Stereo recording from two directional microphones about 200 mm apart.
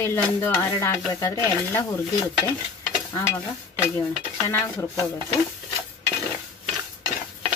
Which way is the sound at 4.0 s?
15° left (ahead or behind).